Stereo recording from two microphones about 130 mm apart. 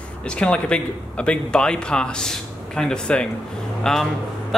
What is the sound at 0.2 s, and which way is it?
A man's voice, 10° left (ahead or behind).